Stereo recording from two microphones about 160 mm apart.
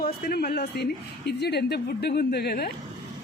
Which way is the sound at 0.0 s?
70° left (ahead or behind).